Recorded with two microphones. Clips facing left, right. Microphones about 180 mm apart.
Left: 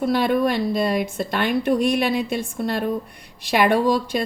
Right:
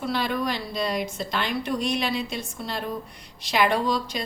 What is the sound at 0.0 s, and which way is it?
A woman's voice, 50° left (ahead or behind).